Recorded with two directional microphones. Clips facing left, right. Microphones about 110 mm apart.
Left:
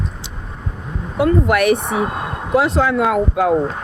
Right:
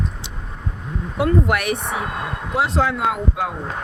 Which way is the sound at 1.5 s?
55° left (ahead or behind).